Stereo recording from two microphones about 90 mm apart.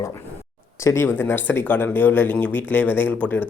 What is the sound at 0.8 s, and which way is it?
Speech, 30° left (ahead or behind).